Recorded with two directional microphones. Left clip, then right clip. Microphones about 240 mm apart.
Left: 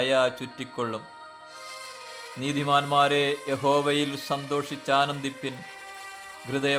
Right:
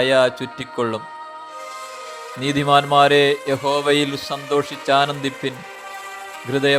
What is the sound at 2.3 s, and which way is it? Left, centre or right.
Music, centre.